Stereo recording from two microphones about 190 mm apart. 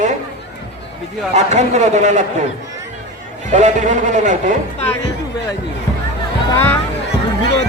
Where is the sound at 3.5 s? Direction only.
40° right (ahead or behind).